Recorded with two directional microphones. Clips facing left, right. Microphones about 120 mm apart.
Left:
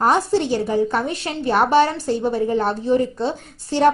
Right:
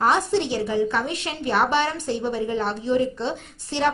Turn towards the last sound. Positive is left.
turn(degrees=40)  # may be behind; listen again after turning